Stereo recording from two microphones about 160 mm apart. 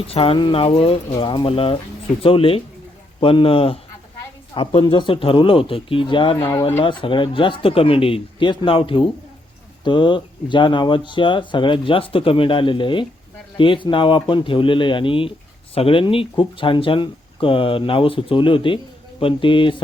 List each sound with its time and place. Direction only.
0.1 s speech: 35° left (ahead or behind)
6.4 s speech: 20° left (ahead or behind)
6.8 s speech: 30° left (ahead or behind)